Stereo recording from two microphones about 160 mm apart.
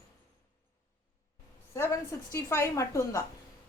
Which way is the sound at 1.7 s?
15° left (ahead or behind).